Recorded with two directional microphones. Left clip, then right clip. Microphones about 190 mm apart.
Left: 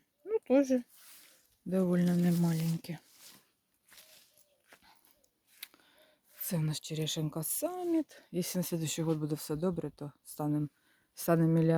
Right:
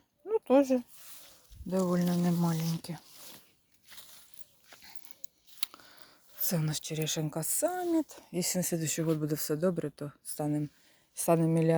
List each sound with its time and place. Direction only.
0.3 s speech: centre (ahead or behind)
1.7 s speech: 20° left (ahead or behind)
2.6 s speech: 30° right (ahead or behind)
3.9 s a sound: 45° right (ahead or behind)
5.5 s a sound: centre (ahead or behind)
6.4 s speech: 5° left (ahead or behind)